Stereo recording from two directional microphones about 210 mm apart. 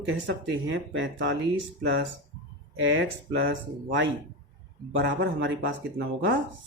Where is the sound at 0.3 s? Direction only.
60° right (ahead or behind).